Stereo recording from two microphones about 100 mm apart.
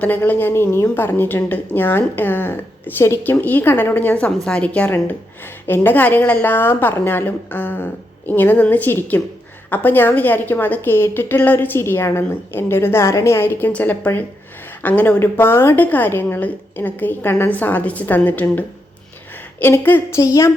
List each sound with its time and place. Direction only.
0.0 s a woman's voice: 15° left (ahead or behind)